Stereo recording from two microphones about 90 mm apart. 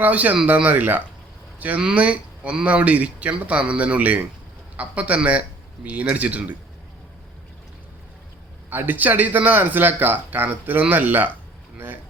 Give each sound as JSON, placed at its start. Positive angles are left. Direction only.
{"t": 0.0, "sound": "speech", "side_deg": -15}
{"t": 8.7, "sound": "speech", "side_deg": -20}